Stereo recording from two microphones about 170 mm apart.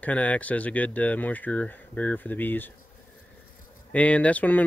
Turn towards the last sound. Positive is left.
turn(degrees=10)  # may be behind; listen again after turning